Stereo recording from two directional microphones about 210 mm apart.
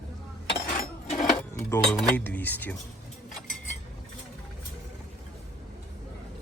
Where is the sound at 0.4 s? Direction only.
55° left (ahead or behind).